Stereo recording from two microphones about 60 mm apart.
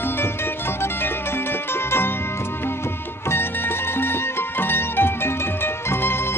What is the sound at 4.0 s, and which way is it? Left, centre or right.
Music, left.